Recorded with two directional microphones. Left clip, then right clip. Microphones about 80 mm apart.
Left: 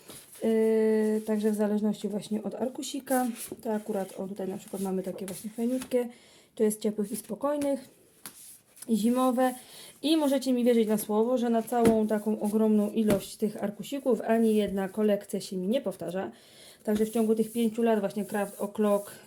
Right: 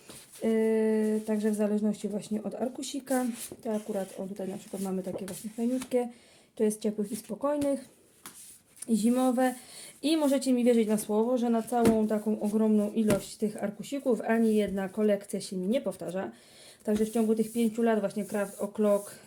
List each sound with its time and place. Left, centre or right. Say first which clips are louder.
0.3 s speech: left 2 dB; left
8.9 s speech: left 1 dB; centre
12.5 s speech: left 2 dB; left